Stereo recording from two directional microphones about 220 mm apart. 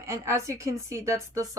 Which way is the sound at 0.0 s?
15° right (ahead or behind).